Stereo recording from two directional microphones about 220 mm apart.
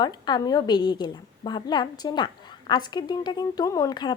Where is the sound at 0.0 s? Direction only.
20° left (ahead or behind).